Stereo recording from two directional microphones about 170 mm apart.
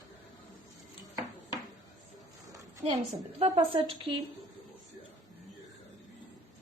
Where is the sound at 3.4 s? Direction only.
35° right (ahead or behind).